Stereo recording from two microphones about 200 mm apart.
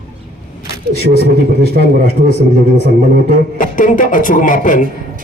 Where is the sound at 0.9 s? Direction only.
55° left (ahead or behind).